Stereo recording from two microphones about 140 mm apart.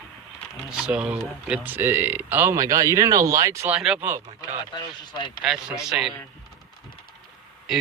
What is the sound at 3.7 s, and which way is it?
Speech, 5° right (ahead or behind).